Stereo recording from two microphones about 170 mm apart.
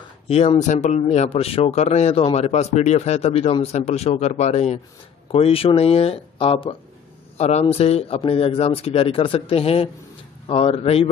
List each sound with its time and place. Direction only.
0.3 s speech: 40° left (ahead or behind)